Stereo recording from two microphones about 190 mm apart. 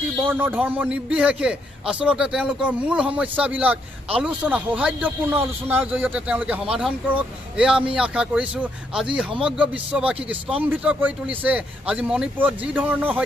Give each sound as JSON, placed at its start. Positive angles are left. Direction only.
{"t": 0.2, "sound": "a man's voice", "side_deg": -10}